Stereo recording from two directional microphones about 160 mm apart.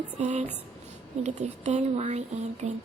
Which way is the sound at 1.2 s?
45° right (ahead or behind).